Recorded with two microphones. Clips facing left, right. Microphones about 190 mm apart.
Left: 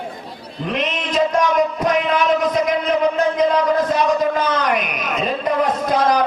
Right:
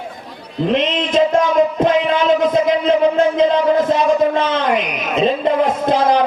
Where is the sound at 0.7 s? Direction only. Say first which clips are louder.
Right 5 dB; 25° right (ahead or behind).